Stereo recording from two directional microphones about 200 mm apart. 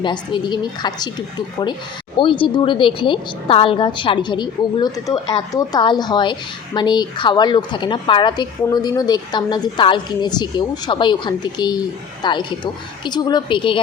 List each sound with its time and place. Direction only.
0.0 s a woman's voice: 20° left (ahead or behind)